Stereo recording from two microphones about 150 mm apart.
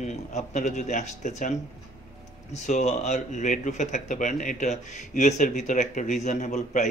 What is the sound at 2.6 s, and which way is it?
Speech, 50° left (ahead or behind).